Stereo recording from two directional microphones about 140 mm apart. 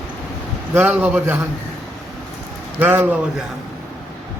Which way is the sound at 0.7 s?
15° right (ahead or behind).